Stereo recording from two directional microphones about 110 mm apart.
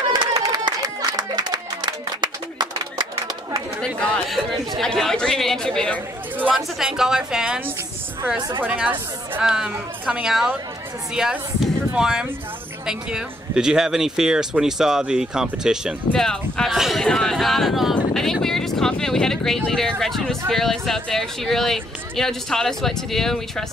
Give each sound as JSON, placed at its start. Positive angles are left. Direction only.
{"t": 0.1, "sound": "a sound", "side_deg": -40}
{"t": 3.8, "sound": "speech", "side_deg": 5}
{"t": 6.5, "sound": "a woman's voice", "side_deg": -5}
{"t": 16.1, "sound": "speech", "side_deg": 5}